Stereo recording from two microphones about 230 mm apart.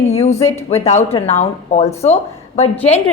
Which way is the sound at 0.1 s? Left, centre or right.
Left.